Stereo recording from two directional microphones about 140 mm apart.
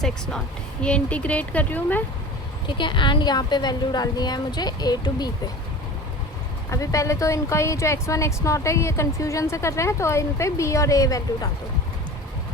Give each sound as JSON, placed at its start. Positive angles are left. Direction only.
{"t": 0.0, "sound": "a woman's voice", "side_deg": 5}
{"t": 2.6, "sound": "a woman's voice", "side_deg": 35}
{"t": 6.7, "sound": "speech", "side_deg": 20}